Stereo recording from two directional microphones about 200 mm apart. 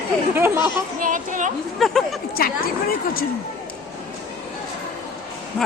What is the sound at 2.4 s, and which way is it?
Speech, 50° left (ahead or behind).